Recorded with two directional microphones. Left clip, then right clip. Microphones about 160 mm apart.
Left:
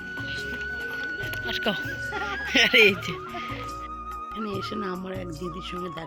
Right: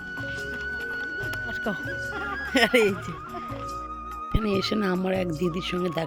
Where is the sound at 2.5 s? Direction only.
25° right (ahead or behind).